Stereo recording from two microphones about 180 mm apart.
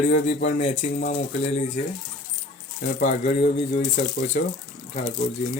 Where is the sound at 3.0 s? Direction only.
45° left (ahead or behind).